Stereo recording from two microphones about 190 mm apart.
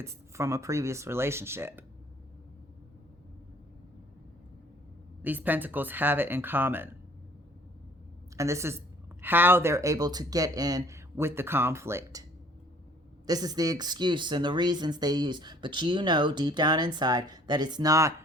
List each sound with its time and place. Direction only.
0.0 s speech: 15° right (ahead or behind)
5.2 s speech: 10° right (ahead or behind)
8.4 s speech: 15° right (ahead or behind)
13.2 s speech: 20° right (ahead or behind)